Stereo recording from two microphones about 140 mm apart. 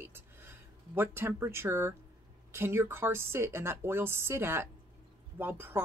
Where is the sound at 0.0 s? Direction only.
15° right (ahead or behind).